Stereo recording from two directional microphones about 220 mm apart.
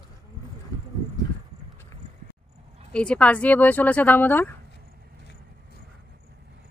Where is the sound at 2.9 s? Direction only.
5° left (ahead or behind).